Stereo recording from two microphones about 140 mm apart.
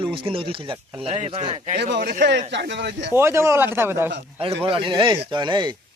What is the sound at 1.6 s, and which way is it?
Speech, 65° right (ahead or behind).